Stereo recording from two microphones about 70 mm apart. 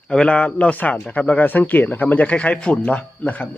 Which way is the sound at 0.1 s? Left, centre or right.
Centre.